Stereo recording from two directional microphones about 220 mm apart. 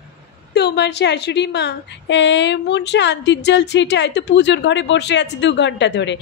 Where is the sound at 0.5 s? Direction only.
50° left (ahead or behind).